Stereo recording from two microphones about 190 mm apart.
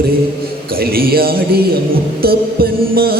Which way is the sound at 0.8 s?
50° right (ahead or behind).